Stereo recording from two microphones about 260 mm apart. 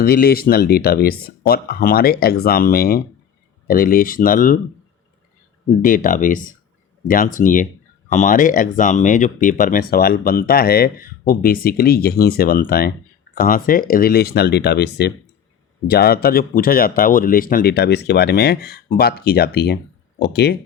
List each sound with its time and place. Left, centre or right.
0.0 s speech: left
5.8 s speech: left